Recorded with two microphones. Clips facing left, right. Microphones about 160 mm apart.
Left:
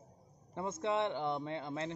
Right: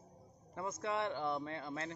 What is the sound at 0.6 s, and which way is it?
Speech, 20° left (ahead or behind).